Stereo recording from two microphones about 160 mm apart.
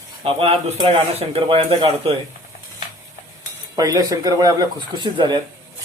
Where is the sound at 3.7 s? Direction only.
20° right (ahead or behind).